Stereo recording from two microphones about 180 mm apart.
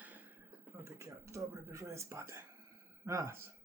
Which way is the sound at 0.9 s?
15° right (ahead or behind).